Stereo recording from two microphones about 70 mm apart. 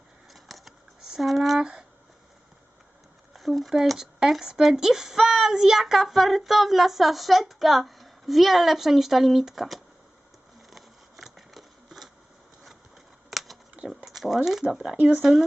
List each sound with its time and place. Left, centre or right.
0.3 s a sound: centre
3.3 s speech: centre
10.7 s patter: centre
13.8 s speech: centre
14.9 s speech: right
15.2 s speech: centre